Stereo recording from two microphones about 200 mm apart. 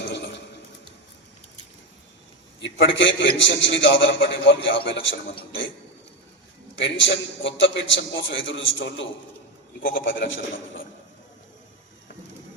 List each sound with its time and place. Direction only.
0.0 s a sound: 60° left (ahead or behind)
2.6 s a man's voice: 65° left (ahead or behind)
6.7 s a man's voice: 65° left (ahead or behind)